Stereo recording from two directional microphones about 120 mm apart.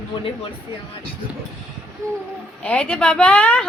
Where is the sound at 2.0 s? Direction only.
25° right (ahead or behind).